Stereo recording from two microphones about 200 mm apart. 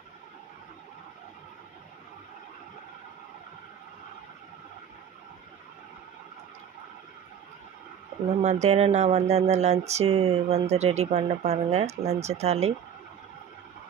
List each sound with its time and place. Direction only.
8.3 s speech: 35° right (ahead or behind)